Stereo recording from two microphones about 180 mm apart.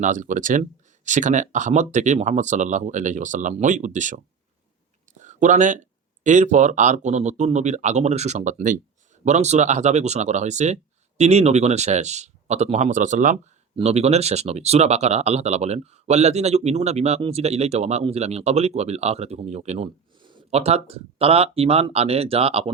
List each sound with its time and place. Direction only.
0.0 s speech: 45° right (ahead or behind)
5.2 s speech: 45° right (ahead or behind)